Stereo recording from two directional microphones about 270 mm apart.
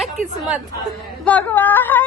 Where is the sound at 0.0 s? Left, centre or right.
Centre.